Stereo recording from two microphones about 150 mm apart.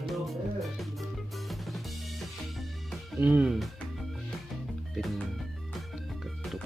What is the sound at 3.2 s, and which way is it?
Speech, 10° right (ahead or behind).